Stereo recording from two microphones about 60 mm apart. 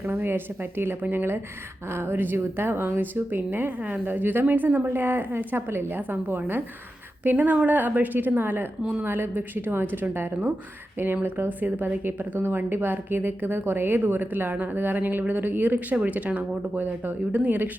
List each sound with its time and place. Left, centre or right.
0.0 s speech: right
8.8 s speech: centre
9.0 s speech: right